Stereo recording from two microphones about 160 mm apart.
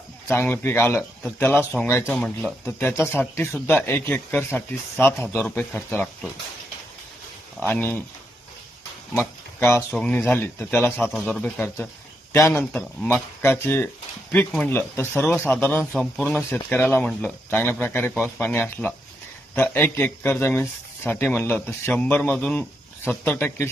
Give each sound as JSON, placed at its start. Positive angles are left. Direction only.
{"t": 0.3, "sound": "speech", "side_deg": 10}
{"t": 2.1, "sound": "speech", "side_deg": 5}
{"t": 7.6, "sound": "speech", "side_deg": 15}
{"t": 9.1, "sound": "speech", "side_deg": 15}